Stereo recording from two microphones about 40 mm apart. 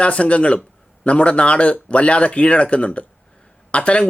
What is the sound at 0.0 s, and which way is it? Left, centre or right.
Speech, left.